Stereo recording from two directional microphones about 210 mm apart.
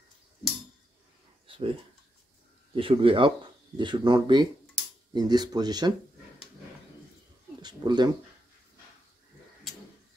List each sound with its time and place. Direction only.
1.5 s a sound: 25° right (ahead or behind)
2.7 s speech: 25° right (ahead or behind)
7.6 s speech: 20° right (ahead or behind)